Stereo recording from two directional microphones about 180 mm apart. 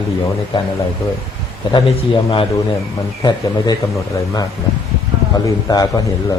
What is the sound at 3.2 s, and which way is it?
Speech, 20° left (ahead or behind).